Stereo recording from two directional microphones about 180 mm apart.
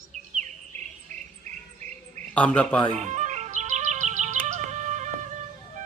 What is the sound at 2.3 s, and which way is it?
Speech, 5° left (ahead or behind).